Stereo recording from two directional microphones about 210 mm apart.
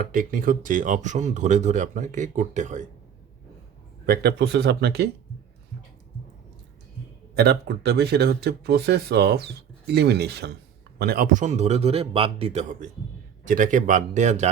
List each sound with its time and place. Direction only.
0.0 s speech: 40° right (ahead or behind)
4.0 s speech: 45° right (ahead or behind)
7.3 s speech: 50° right (ahead or behind); by 14.5 s 35° right (ahead or behind)